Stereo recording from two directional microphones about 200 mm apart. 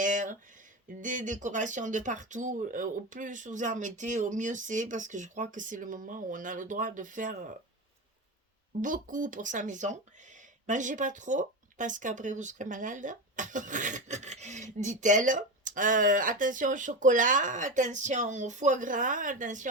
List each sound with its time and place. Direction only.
0.0 s a sound: 40° right (ahead or behind)
0.9 s speech: 40° right (ahead or behind)
8.8 s speech: 40° right (ahead or behind)